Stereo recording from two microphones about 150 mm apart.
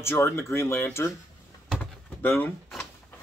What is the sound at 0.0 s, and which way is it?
Speech, 15° left (ahead or behind).